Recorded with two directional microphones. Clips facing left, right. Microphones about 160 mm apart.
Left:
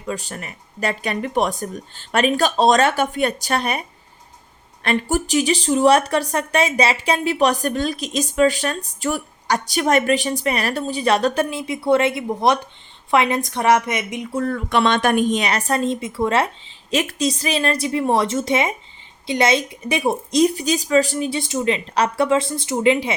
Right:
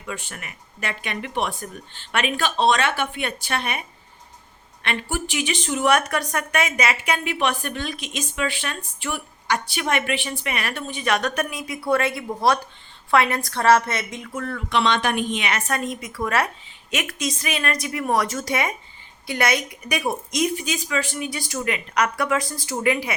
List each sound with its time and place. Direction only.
0.0 s a woman's voice: 35° left (ahead or behind); by 14.3 s 15° left (ahead or behind)
14.3 s speech: 40° left (ahead or behind); by 23.1 s 25° left (ahead or behind)